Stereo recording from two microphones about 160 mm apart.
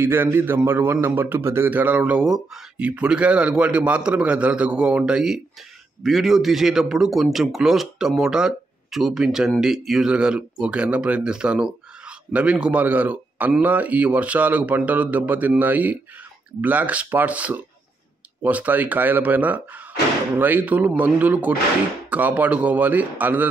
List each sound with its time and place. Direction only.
0.0 s a man's voice: 15° right (ahead or behind)